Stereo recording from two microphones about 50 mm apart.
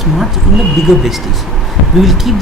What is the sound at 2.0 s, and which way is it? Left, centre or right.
Speech, centre.